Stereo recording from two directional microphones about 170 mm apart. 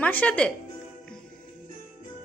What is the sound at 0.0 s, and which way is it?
Speech, 10° left (ahead or behind).